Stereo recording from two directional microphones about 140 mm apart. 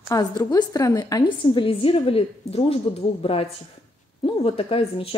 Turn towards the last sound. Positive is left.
turn(degrees=45)  # may be behind; listen again after turning